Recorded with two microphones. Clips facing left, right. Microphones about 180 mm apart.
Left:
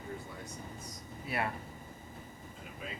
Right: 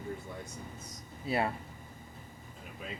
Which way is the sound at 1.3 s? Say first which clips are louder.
Right 4 dB; 25° right (ahead or behind).